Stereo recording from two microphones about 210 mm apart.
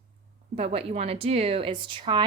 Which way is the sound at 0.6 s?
30° right (ahead or behind).